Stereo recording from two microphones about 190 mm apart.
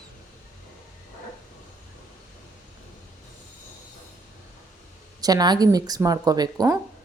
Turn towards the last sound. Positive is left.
turn(degrees=-20)  # may be behind; listen again after turning